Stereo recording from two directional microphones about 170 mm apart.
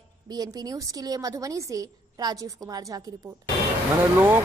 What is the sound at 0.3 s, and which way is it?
A woman's voice, 25° right (ahead or behind).